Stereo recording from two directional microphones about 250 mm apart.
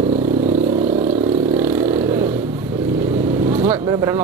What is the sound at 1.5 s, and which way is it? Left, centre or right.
Vehicle, centre.